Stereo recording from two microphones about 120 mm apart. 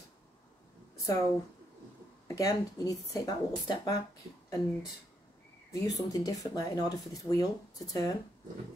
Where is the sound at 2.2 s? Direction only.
30° left (ahead or behind).